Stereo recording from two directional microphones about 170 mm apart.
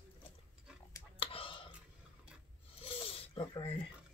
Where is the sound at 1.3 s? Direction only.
30° left (ahead or behind).